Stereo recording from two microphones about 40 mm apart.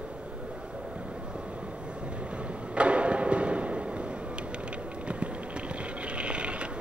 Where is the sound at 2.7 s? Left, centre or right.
Right.